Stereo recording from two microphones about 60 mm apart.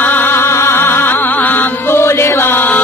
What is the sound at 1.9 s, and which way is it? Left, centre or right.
Chant, left.